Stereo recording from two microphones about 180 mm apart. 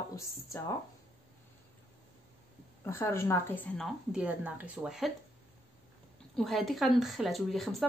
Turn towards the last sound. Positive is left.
turn(degrees=0)  # may be behind; listen again after turning